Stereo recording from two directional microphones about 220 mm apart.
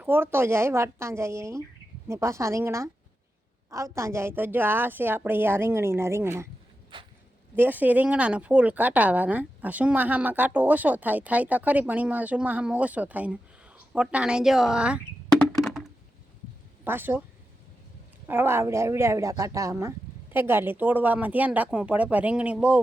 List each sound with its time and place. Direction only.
0.0 s speech: 10° right (ahead or behind)
6.9 s a sound: 20° right (ahead or behind)
7.5 s speech: 10° right (ahead or behind)
18.3 s speech: 10° right (ahead or behind)